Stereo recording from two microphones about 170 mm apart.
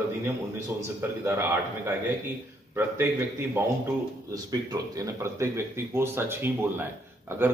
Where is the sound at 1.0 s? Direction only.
15° right (ahead or behind).